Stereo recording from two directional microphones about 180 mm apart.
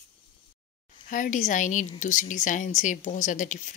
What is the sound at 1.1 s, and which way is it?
A woman's voice, 45° left (ahead or behind).